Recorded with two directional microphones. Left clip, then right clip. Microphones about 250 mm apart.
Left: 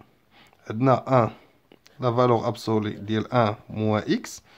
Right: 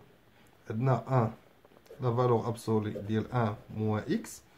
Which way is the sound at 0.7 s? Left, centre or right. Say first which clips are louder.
Left 11 dB; left.